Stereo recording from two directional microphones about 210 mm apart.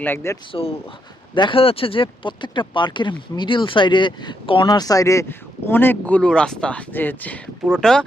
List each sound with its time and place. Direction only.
0.0 s speech: 10° left (ahead or behind)
0.5 s speech: 25° left (ahead or behind); by 8.0 s 5° left (ahead or behind)